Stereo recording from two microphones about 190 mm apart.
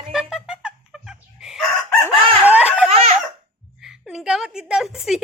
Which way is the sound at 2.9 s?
30° right (ahead or behind).